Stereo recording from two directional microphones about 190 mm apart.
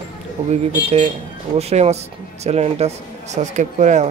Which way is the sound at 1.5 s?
35° right (ahead or behind).